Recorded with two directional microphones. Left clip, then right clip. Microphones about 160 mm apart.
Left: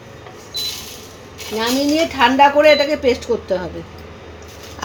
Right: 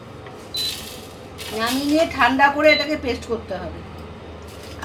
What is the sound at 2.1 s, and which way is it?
A woman's voice, 60° left (ahead or behind).